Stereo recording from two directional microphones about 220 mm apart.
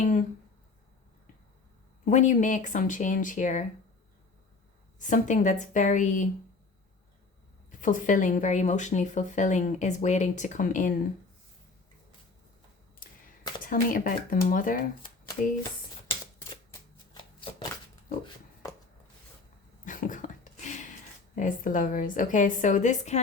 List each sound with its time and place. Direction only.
0.0 s speech: 35° left (ahead or behind)
2.0 s speech: 35° left (ahead or behind)
4.9 s speech: 35° left (ahead or behind)
7.7 s speech: 35° left (ahead or behind)
13.7 s speech: 40° left (ahead or behind)
19.8 s a sound: 35° left (ahead or behind)
21.3 s speech: 35° left (ahead or behind)